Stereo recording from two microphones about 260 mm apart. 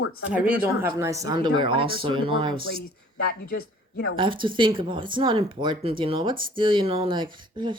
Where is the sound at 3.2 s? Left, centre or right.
Left.